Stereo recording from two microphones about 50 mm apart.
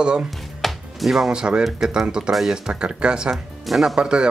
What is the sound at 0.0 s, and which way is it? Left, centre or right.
Speech, centre.